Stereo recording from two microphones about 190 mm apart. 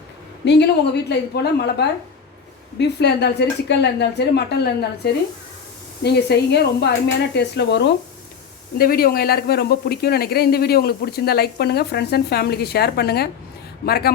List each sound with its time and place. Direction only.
0.4 s speech: 60° left (ahead or behind)
8.8 s speech: 50° left (ahead or behind)